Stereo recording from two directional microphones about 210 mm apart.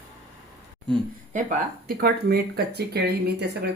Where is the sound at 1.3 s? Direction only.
35° right (ahead or behind).